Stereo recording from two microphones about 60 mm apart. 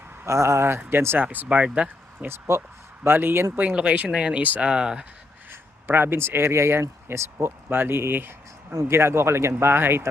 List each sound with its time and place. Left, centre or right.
0.3 s speech: right
1.2 s speech: right
2.2 s speech: right
3.5 s speech: right
4.4 s speech: right
4.7 s speech: centre
5.5 s speech: right